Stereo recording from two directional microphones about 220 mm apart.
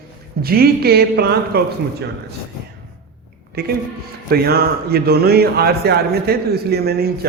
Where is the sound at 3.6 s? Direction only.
45° right (ahead or behind).